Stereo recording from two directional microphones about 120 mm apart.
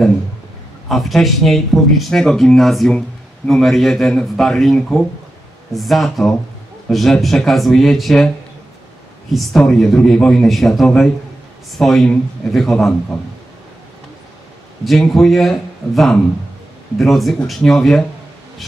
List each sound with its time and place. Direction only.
0.8 s speech: centre (ahead or behind)
9.3 s speech: centre (ahead or behind)
14.9 s speech: centre (ahead or behind)